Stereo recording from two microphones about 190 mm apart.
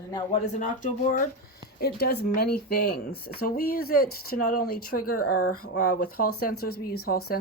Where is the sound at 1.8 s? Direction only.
55° left (ahead or behind).